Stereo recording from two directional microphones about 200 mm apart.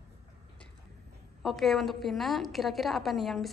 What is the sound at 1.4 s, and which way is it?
A woman's voice, centre (ahead or behind).